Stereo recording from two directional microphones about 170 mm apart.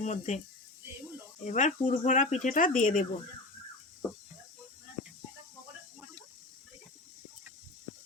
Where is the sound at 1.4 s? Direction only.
45° left (ahead or behind).